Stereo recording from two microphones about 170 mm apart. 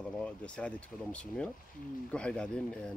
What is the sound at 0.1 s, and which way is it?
Speech, 5° left (ahead or behind).